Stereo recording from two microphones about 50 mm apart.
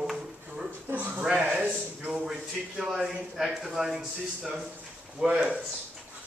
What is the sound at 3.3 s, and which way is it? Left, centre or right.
A man's voice, centre.